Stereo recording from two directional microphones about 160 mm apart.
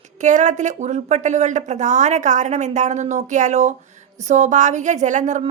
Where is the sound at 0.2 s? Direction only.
50° right (ahead or behind).